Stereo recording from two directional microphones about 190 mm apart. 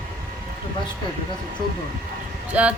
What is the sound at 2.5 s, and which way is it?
Speech, 5° right (ahead or behind).